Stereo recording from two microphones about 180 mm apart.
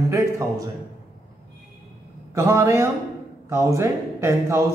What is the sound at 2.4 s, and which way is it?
A man's voice, 15° right (ahead or behind).